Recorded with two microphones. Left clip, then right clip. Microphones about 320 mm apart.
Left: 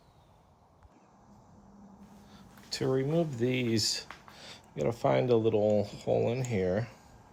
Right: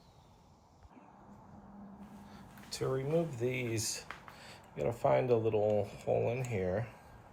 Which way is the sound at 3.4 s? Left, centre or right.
Left.